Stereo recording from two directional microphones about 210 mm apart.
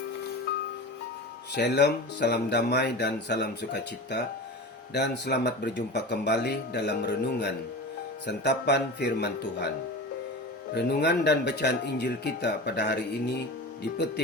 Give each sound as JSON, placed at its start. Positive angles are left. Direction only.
{"t": 1.5, "sound": "speech", "side_deg": 55}
{"t": 10.8, "sound": "speech", "side_deg": 55}